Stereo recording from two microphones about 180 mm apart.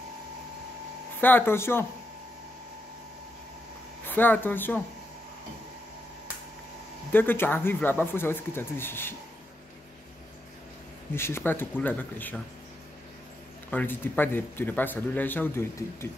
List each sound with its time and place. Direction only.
1.2 s speech: 10° left (ahead or behind)
4.0 s speech: 10° left (ahead or behind)
7.1 s speech: 10° left (ahead or behind)
11.1 s speech: 15° left (ahead or behind)
13.7 s speech: 10° left (ahead or behind)